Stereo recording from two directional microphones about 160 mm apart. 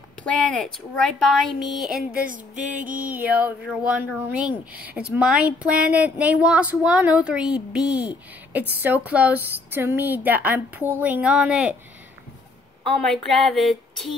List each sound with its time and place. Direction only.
0.2 s a woman's voice: 5° left (ahead or behind)
2.1 s a sound: 60° right (ahead or behind)
2.8 s speech: 10° right (ahead or behind)
13.1 s a woman's voice: centre (ahead or behind)